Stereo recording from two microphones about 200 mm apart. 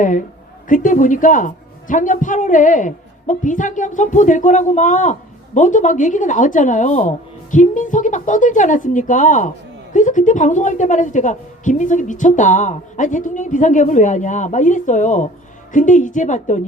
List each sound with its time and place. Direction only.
0.0 s a woman's voice: 40° left (ahead or behind)